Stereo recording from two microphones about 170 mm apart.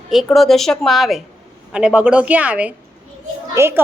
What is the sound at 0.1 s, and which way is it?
A woman's voice, centre (ahead or behind).